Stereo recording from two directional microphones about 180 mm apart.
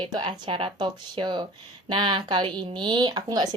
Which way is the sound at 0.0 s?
25° right (ahead or behind).